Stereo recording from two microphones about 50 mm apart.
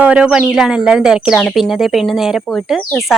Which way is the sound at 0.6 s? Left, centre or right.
Centre.